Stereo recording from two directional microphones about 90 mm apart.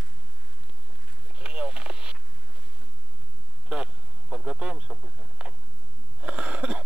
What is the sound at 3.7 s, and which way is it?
Vehicle, 10° right (ahead or behind).